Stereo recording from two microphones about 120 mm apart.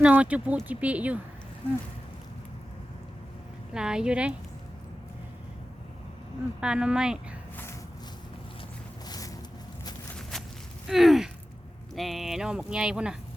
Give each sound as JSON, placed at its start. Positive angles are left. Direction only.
{"t": 0.0, "sound": "speech", "side_deg": -10}
{"t": 3.8, "sound": "speech", "side_deg": -5}
{"t": 6.6, "sound": "speech", "side_deg": -5}
{"t": 7.5, "sound": "a sound", "side_deg": 20}
{"t": 9.0, "sound": "music", "side_deg": 30}
{"t": 10.3, "sound": "walk", "side_deg": 5}
{"t": 10.8, "sound": "a sound", "side_deg": 0}
{"t": 11.9, "sound": "speech", "side_deg": 0}